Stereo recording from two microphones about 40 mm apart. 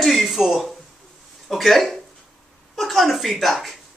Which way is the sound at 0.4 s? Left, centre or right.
Centre.